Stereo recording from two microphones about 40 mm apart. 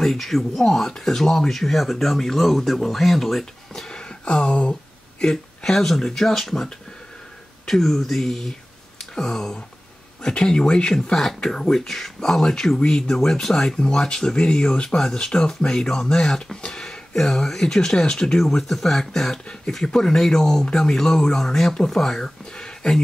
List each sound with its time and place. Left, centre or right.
0.0 s speech: centre; by 4.7 s left
5.2 s speech: centre
11.1 s speech: centre
13.7 s speech: left
18.4 s speech: centre